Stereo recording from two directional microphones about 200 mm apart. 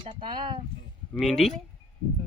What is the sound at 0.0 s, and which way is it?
Speech, 25° right (ahead or behind).